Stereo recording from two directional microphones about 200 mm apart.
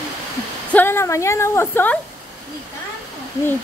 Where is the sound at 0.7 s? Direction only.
10° left (ahead or behind).